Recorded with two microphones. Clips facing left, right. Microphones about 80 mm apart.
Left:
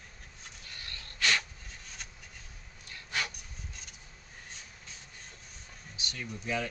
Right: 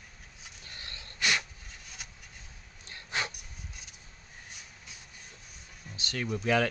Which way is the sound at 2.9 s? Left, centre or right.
Right.